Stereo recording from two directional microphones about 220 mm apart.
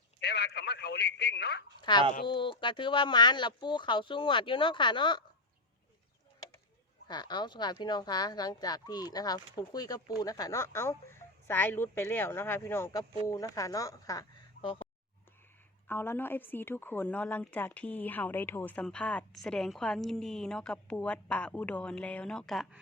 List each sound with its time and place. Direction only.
0.2 s speech: 50° left (ahead or behind)
1.8 s speech: 20° left (ahead or behind)
7.1 s speech: 20° left (ahead or behind)
15.9 s a woman's voice: 10° left (ahead or behind)